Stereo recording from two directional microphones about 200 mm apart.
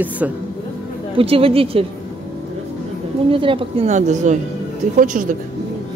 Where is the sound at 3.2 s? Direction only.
25° right (ahead or behind).